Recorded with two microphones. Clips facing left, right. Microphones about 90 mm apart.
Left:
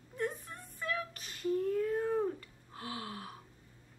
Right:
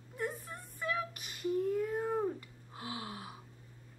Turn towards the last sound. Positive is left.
turn(degrees=-15)  # may be behind; listen again after turning